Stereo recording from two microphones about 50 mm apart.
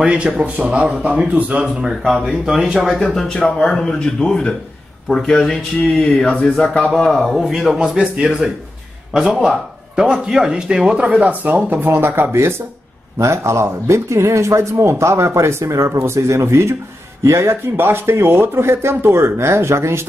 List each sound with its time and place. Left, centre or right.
0.0 s a man's voice: right
1.8 s speech: centre
2.6 s a man's voice: centre
3.0 s speech: centre
5.9 s speech: left
7.2 s a man's voice: centre
11.1 s speech: right
12.3 s speech: right
13.2 s speech: right